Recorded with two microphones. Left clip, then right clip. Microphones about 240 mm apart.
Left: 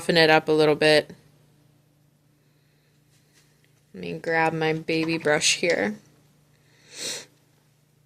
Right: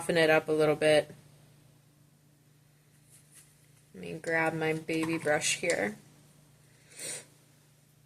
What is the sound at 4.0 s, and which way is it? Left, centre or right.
Speech, left.